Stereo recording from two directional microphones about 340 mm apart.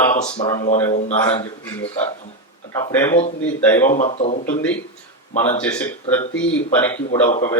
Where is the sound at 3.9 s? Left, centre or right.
Centre.